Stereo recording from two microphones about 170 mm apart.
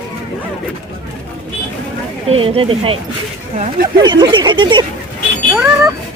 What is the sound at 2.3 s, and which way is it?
Speech, 30° right (ahead or behind).